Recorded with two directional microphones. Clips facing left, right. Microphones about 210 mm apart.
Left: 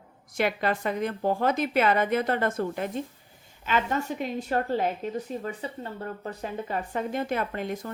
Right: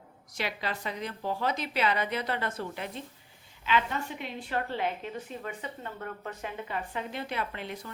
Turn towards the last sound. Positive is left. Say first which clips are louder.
# left 6 dB
turn(degrees=45)  # may be behind; listen again after turning